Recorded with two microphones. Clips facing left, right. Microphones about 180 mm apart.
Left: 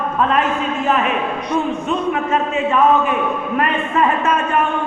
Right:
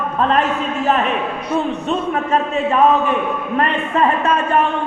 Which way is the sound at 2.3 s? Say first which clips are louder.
Right 2 dB; 35° right (ahead or behind).